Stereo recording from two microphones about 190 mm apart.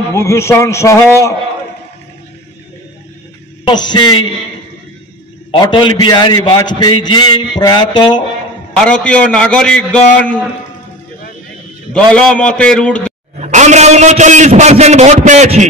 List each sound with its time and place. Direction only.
0.1 s a man's voice: 15° left (ahead or behind)
3.6 s a man's voice: 25° left (ahead or behind)
5.5 s a man's voice: 25° left (ahead or behind)
9.0 s a man's voice: 5° left (ahead or behind)
11.9 s a man's voice: 5° left (ahead or behind)
13.4 s a man's voice: 40° right (ahead or behind)